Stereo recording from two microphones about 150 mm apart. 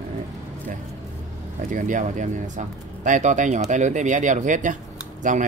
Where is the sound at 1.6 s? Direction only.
60° right (ahead or behind).